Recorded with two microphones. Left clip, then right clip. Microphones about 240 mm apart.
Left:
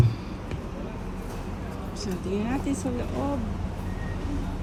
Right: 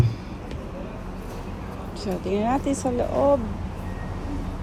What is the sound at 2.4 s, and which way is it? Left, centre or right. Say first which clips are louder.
Speech: right 6 dB; right.